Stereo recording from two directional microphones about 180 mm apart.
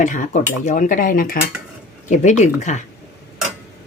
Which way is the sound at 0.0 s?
45° left (ahead or behind).